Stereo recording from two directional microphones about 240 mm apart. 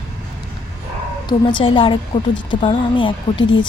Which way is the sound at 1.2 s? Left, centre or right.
Centre.